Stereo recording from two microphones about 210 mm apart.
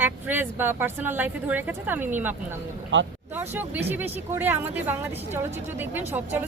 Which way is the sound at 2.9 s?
60° right (ahead or behind).